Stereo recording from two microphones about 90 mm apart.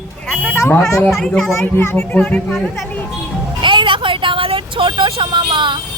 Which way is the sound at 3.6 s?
65° right (ahead or behind).